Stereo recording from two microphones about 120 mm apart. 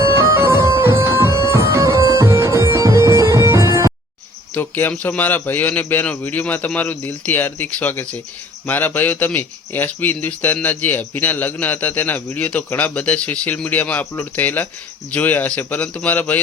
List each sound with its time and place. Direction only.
0.0 s music: 25° right (ahead or behind)
4.5 s speech: 15° left (ahead or behind)